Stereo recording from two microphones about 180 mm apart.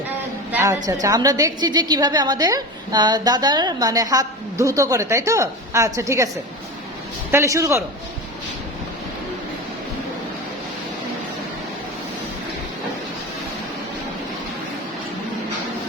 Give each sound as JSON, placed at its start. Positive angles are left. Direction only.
{"t": 0.5, "sound": "a sound", "side_deg": -15}
{"t": 1.0, "sound": "a woman's voice", "side_deg": -20}
{"t": 7.3, "sound": "a man's voice", "side_deg": -15}